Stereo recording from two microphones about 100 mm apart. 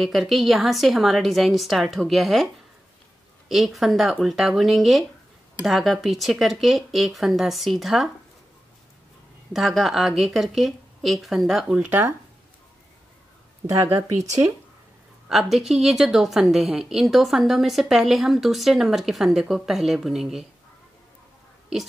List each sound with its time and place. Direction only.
0.0 s speech: centre (ahead or behind)
3.4 s speech: centre (ahead or behind)
9.5 s speech: centre (ahead or behind)
11.8 s speech: 15° right (ahead or behind)
13.8 s speech: 25° right (ahead or behind)
15.2 s speech: 5° right (ahead or behind)